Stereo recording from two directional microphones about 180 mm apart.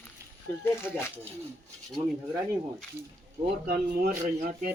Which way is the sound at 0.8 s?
15° left (ahead or behind).